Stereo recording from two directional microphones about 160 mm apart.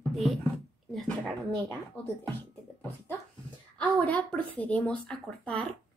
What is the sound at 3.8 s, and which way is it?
Speech, 10° left (ahead or behind).